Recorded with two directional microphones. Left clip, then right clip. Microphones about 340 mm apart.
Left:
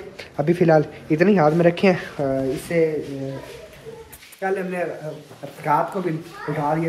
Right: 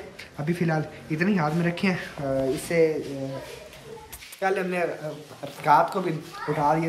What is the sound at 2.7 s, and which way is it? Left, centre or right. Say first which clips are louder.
Speech: left 2 dB; centre.